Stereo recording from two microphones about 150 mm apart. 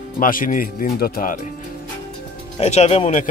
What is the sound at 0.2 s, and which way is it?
Speech, 65° left (ahead or behind).